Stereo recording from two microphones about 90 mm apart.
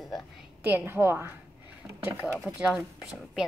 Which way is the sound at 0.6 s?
20° right (ahead or behind).